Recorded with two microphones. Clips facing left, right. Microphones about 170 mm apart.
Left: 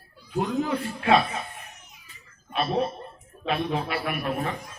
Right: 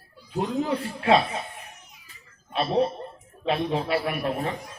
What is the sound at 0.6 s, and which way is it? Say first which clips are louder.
Speech: even; 30° right (ahead or behind).